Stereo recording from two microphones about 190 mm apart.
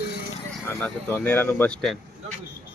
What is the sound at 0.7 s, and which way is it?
Speech, 5° left (ahead or behind).